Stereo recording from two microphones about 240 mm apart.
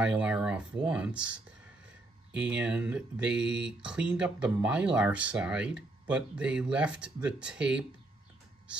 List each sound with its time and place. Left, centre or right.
0.0 s speech: centre